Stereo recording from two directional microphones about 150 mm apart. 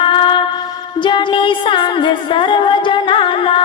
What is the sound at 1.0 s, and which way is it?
Music, 30° left (ahead or behind).